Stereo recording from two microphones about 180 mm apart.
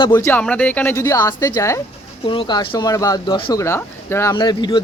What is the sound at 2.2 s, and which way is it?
Speech, 30° left (ahead or behind).